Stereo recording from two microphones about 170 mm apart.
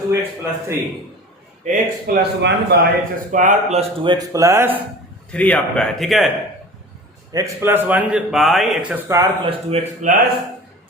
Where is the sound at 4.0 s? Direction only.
30° right (ahead or behind).